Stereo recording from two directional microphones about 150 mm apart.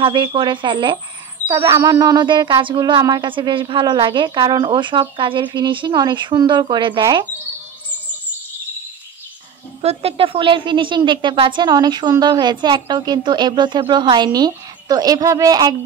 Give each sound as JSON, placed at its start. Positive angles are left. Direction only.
{"t": 0.0, "sound": "speech", "side_deg": -30}
{"t": 9.8, "sound": "a woman's voice", "side_deg": -40}